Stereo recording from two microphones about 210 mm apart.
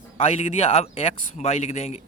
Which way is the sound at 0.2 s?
30° left (ahead or behind).